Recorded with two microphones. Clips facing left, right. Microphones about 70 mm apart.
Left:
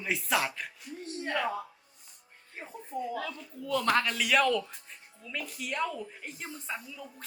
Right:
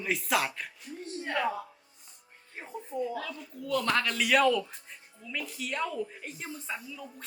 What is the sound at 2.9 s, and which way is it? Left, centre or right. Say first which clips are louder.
Speech: right 3 dB; centre.